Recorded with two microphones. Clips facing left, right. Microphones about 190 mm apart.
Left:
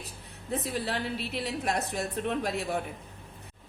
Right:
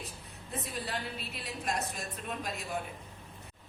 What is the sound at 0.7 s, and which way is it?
Speech, 70° left (ahead or behind).